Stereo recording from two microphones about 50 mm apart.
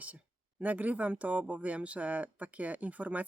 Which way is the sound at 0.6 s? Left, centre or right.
Right.